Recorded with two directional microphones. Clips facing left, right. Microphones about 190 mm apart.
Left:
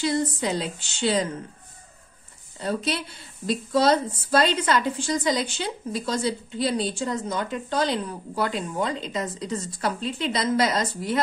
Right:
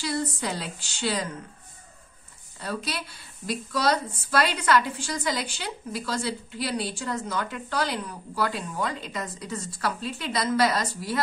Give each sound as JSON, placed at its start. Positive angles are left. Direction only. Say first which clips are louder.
{"t": 0.0, "sound": "a woman's voice", "louder": "left 5 dB", "side_deg": 20}
{"t": 2.6, "sound": "a woman's voice", "louder": "left 5 dB", "side_deg": 25}